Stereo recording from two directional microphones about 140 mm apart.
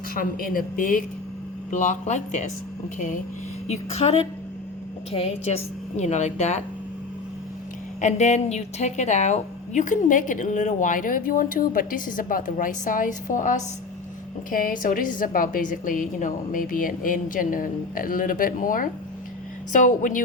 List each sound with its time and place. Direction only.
0.1 s speech: 90° left
1.7 s speech: 60° left (ahead or behind)
3.7 s a woman's voice: 50° left (ahead or behind)
8.0 s a woman's voice: 55° left (ahead or behind)
14.5 s a woman's voice: 80° left